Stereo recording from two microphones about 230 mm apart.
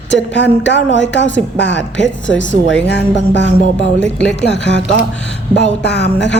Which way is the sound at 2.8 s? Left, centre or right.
Left.